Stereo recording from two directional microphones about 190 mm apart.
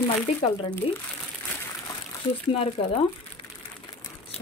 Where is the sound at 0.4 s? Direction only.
25° left (ahead or behind).